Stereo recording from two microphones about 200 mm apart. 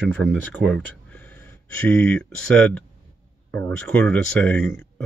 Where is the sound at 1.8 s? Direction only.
5° left (ahead or behind).